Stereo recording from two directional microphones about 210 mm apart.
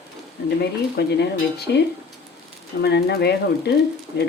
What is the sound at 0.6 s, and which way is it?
Speech, 50° left (ahead or behind).